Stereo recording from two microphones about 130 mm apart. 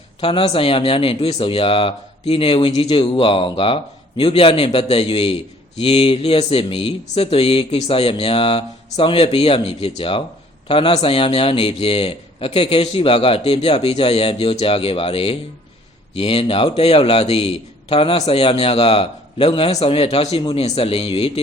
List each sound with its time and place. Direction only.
0.2 s a man's voice: 45° left (ahead or behind)